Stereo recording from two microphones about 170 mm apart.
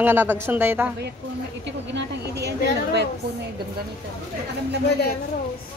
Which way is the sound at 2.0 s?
85° right.